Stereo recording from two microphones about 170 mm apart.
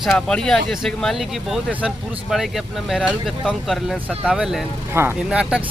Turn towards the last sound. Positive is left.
turn(degrees=-5)  # may be behind; listen again after turning